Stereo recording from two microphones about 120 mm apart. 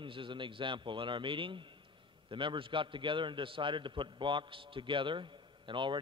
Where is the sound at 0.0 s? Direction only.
45° right (ahead or behind).